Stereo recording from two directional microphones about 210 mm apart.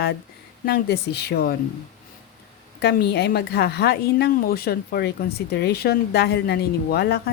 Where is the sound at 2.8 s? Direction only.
50° left (ahead or behind).